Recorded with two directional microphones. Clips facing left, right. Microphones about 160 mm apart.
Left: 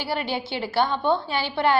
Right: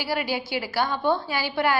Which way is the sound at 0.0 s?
25° left (ahead or behind).